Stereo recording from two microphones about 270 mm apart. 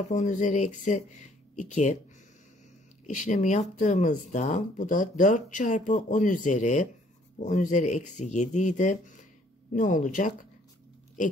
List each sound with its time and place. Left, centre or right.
0.1 s speech: left
3.1 s speech: left